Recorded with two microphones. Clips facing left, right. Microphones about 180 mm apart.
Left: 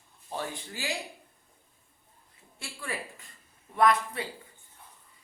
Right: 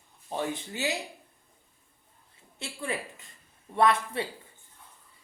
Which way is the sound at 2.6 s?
20° right (ahead or behind).